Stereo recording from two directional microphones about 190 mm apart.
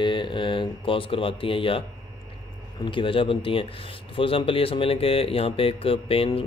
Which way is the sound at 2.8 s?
25° left (ahead or behind).